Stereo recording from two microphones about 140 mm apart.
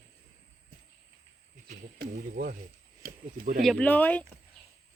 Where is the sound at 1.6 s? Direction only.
75° right (ahead or behind).